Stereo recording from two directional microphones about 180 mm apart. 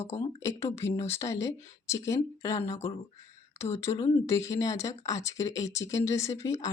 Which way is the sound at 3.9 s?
25° left (ahead or behind).